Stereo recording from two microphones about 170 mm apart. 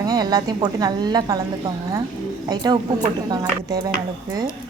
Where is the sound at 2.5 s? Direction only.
25° right (ahead or behind).